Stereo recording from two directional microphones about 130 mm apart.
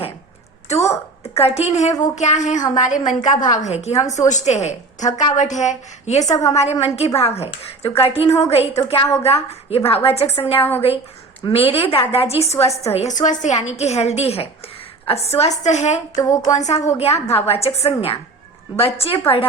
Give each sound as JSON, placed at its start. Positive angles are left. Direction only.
{"t": 0.7, "sound": "a woman's voice", "side_deg": 55}
{"t": 10.6, "sound": "a woman's voice", "side_deg": 20}
{"t": 11.5, "sound": "a woman's voice", "side_deg": 50}